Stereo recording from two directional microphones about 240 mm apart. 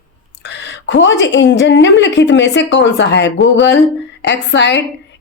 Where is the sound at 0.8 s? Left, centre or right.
Left.